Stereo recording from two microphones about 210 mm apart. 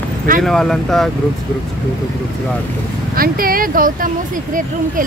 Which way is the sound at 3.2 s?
45° right (ahead or behind).